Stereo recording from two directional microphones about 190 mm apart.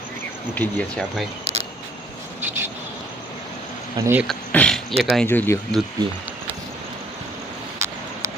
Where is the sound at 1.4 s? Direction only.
35° right (ahead or behind).